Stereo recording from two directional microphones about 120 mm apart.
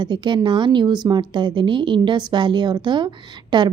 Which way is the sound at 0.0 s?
40° right (ahead or behind).